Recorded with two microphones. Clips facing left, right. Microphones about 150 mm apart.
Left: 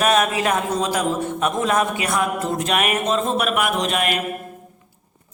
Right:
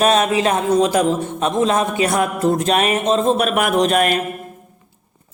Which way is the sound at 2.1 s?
35° right (ahead or behind).